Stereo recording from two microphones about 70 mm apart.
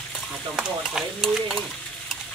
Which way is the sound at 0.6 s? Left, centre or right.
Centre.